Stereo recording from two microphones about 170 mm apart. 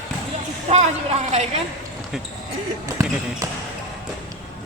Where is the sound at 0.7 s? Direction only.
40° right (ahead or behind).